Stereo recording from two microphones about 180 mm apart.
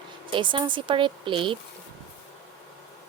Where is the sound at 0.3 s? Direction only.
25° right (ahead or behind).